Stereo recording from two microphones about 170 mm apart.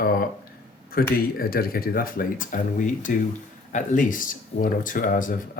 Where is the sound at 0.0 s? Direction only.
55° left (ahead or behind).